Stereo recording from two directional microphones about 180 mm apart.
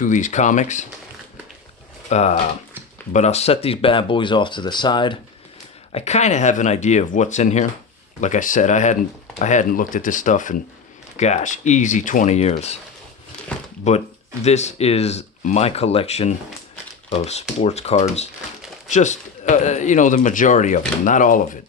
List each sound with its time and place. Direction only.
0.0 s speech: 45° left (ahead or behind)
2.0 s speech: 40° left (ahead or behind)
5.9 s speech: 35° left (ahead or behind)
13.5 s a sound: 5° left (ahead or behind)
14.4 s speech: 40° left (ahead or behind)